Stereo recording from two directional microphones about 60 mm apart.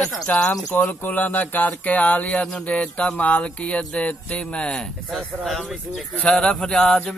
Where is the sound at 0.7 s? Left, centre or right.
Left.